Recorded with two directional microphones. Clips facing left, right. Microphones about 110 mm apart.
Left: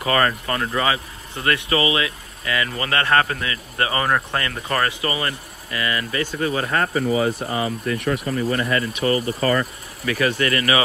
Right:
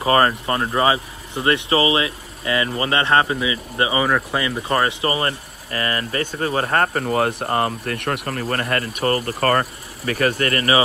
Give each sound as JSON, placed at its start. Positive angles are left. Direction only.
{"t": 0.0, "sound": "speech", "side_deg": -30}
{"t": 5.1, "sound": "speech", "side_deg": -35}
{"t": 10.0, "sound": "speech", "side_deg": -45}